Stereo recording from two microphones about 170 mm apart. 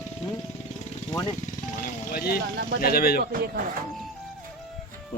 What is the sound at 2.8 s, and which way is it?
Speech, 60° left (ahead or behind).